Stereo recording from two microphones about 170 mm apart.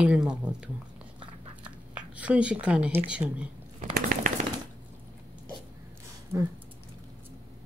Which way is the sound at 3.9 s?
55° right (ahead or behind).